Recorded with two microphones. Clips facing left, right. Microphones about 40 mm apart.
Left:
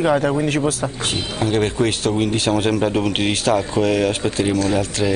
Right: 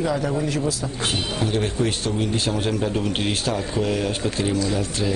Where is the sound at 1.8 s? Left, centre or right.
Left.